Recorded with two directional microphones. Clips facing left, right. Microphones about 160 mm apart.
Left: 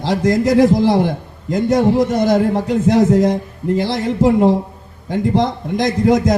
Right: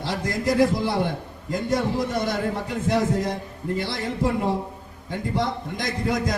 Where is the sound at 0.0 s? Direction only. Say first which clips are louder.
Left 10 dB; 90° left.